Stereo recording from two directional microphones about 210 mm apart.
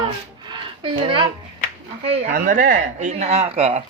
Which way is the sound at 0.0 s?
25° right (ahead or behind).